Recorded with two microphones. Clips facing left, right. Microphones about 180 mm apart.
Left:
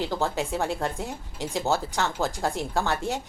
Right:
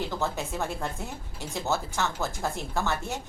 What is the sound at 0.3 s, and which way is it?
A woman's voice, 15° left (ahead or behind).